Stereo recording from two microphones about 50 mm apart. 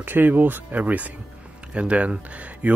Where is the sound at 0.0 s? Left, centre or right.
Right.